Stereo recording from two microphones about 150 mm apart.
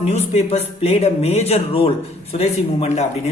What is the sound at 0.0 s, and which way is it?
A man's voice, 45° left (ahead or behind).